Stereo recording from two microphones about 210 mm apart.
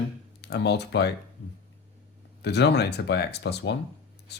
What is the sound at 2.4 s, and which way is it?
Speech, 55° left (ahead or behind).